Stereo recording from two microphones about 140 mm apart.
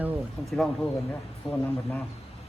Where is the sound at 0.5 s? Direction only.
5° left (ahead or behind).